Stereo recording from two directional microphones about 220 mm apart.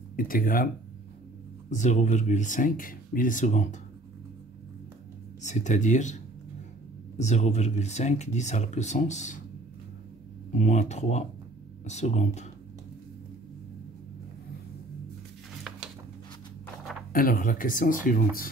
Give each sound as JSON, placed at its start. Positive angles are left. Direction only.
{"t": 0.1, "sound": "speech", "side_deg": 40}
{"t": 1.7, "sound": "speech", "side_deg": 35}
{"t": 5.4, "sound": "speech", "side_deg": 35}
{"t": 10.5, "sound": "speech", "side_deg": 35}
{"t": 17.1, "sound": "speech", "side_deg": 40}